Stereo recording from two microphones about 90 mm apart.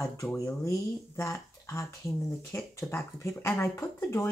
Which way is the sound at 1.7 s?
35° left (ahead or behind).